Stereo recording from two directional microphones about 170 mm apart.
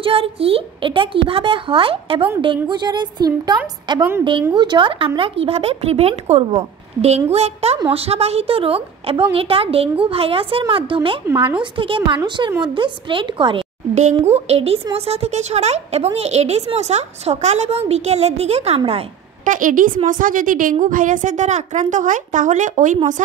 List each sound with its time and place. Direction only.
0.0 s a woman's voice: 35° right (ahead or behind)
19.4 s a woman's voice: 50° right (ahead or behind)